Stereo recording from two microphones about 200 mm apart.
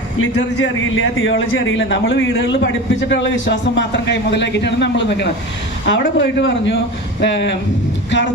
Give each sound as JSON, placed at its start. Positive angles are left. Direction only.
{"t": 0.2, "sound": "a man's voice", "side_deg": 90}